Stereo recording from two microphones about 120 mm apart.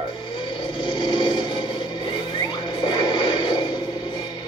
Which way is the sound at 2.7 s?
35° left (ahead or behind).